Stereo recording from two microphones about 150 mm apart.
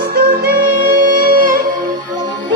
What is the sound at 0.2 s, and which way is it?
Music, 80° right.